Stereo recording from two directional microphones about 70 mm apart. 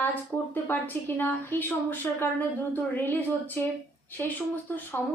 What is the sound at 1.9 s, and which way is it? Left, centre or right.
A woman's voice, left.